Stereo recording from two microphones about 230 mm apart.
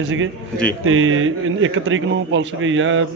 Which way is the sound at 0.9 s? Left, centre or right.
Right.